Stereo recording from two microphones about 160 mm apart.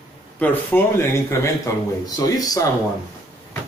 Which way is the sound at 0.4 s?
10° left (ahead or behind).